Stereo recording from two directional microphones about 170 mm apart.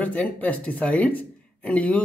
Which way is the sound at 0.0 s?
10° left (ahead or behind).